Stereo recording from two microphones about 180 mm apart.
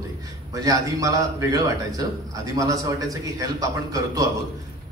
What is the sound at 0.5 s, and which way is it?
A man's voice, 20° right (ahead or behind).